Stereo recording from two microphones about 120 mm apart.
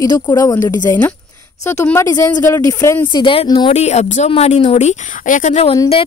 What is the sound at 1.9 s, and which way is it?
Speech, 30° left (ahead or behind).